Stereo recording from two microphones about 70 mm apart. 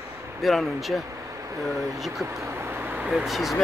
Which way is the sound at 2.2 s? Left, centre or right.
Right.